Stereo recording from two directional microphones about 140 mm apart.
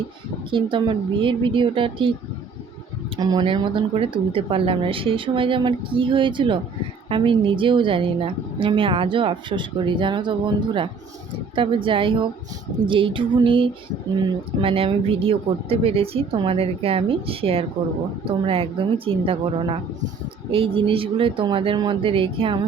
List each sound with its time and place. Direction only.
0.5 s a woman's voice: 35° right (ahead or behind)
3.2 s a woman's voice: 30° right (ahead or behind)